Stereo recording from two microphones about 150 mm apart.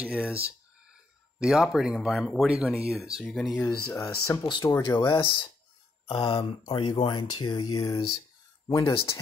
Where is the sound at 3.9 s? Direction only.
20° left (ahead or behind).